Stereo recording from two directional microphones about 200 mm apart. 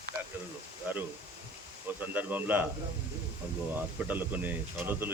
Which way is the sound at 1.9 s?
10° right (ahead or behind).